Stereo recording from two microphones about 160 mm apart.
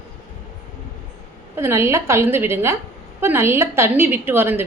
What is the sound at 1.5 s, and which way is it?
A woman's voice, 15° right (ahead or behind).